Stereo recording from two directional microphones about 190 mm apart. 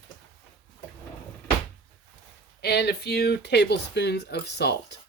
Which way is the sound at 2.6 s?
60° left (ahead or behind).